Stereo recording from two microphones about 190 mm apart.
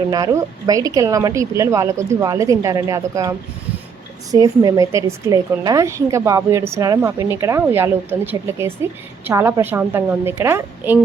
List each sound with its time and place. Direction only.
0.1 s a woman's voice: 20° right (ahead or behind)